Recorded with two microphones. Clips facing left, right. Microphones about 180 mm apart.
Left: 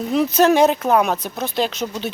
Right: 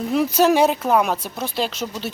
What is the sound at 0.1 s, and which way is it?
Speech, 5° right (ahead or behind).